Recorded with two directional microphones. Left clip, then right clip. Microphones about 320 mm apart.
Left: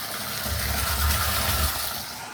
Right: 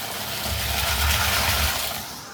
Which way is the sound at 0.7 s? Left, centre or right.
Right.